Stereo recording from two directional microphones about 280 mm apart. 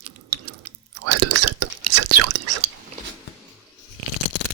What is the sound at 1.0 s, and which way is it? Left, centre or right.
Whispering, right.